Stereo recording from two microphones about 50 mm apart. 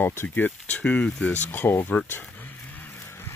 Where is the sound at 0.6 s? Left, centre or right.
Left.